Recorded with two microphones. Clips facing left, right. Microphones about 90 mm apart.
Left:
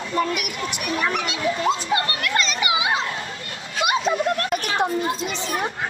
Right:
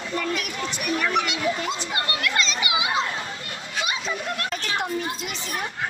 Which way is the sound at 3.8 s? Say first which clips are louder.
Left 11 dB; 60° left (ahead or behind).